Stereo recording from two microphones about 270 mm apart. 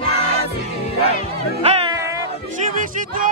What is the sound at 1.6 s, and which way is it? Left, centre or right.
Music, right.